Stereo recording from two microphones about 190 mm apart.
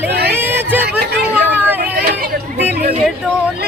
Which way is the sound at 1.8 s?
50° right (ahead or behind).